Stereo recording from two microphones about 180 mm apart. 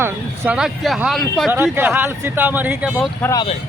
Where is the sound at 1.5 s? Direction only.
10° right (ahead or behind).